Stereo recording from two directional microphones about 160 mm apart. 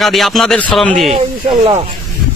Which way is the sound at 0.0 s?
Centre (ahead or behind).